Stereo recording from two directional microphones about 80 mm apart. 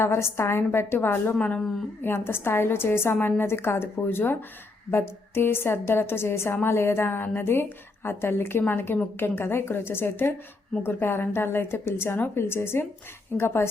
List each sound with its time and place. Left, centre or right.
0.0 s a woman's voice: left
1.4 s speech: centre
2.0 s a woman's voice: left